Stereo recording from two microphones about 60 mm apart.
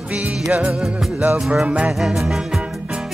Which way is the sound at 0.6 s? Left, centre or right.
Centre.